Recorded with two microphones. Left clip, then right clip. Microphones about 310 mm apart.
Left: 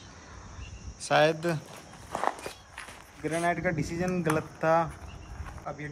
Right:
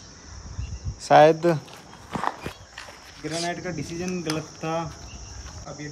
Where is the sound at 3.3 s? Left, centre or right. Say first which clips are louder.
Left 1 dB; centre.